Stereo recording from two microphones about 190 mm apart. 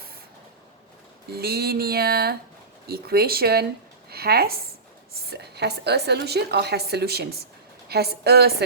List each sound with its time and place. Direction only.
1.3 s a woman's voice: 55° right (ahead or behind)